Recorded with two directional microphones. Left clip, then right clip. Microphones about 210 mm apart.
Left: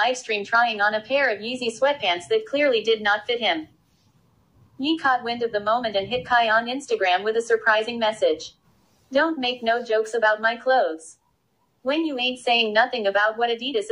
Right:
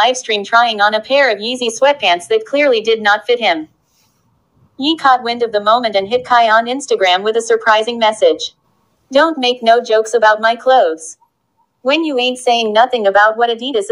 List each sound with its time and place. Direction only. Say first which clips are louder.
0.0 s a woman's voice: right 9 dB; 40° right (ahead or behind)
4.9 s a woman's voice: right 10 dB; 35° right (ahead or behind)
12.7 s a woman's voice: right 10 dB; 45° right (ahead or behind)